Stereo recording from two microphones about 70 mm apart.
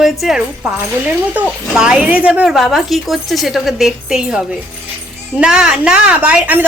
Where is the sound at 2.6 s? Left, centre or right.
Centre.